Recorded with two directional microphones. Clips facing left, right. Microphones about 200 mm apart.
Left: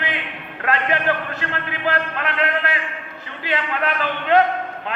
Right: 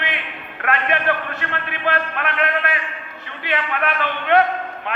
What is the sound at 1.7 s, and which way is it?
A man's voice, 25° left (ahead or behind).